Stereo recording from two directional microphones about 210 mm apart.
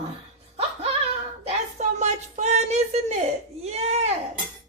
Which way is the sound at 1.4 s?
30° right (ahead or behind).